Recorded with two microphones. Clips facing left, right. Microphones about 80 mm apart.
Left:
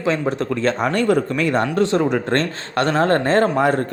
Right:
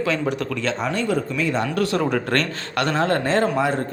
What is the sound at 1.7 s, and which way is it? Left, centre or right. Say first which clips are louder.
Speech: left 3 dB; left.